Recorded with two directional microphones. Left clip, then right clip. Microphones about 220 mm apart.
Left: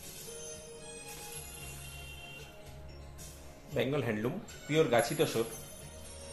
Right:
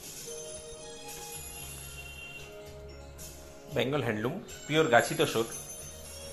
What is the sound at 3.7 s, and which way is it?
Speech, 5° right (ahead or behind).